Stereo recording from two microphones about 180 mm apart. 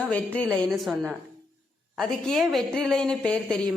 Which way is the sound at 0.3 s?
5° left (ahead or behind).